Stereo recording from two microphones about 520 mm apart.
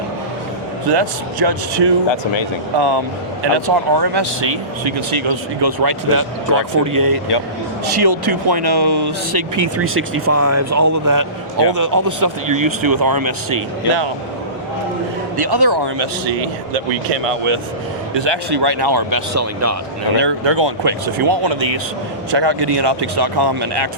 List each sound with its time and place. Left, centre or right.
0.9 s speech: right
3.4 s speech: right
5.6 s speech: right
9.6 s speech: right
15.4 s speech: right
17.2 s speech: right
18.1 s speech: right
19.3 s speech: right
20.1 s speech: right